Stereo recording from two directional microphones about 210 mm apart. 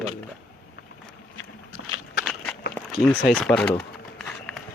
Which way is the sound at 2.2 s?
5° left (ahead or behind).